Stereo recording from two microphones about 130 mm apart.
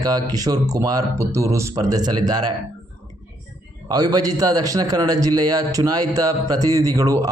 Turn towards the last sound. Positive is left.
turn(degrees=-25)  # may be behind; listen again after turning